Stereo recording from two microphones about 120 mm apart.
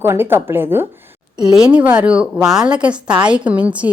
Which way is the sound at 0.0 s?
20° right (ahead or behind).